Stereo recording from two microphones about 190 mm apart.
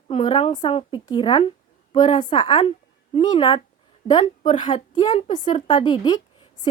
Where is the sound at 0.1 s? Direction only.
30° left (ahead or behind).